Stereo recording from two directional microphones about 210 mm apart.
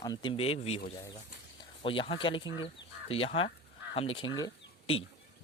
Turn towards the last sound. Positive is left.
turn(degrees=20)  # may be behind; listen again after turning